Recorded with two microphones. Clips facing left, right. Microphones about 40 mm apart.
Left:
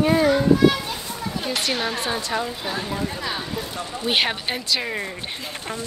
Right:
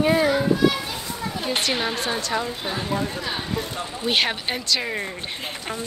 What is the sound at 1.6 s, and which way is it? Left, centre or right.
Speech, centre.